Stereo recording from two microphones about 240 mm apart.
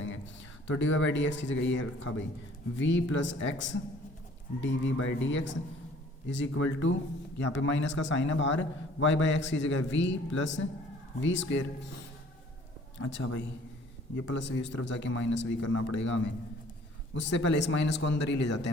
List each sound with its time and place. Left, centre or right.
0.0 s a man's voice: left
13.0 s a man's voice: left